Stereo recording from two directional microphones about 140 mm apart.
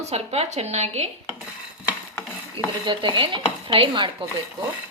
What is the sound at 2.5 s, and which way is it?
Dishes, 35° right (ahead or behind).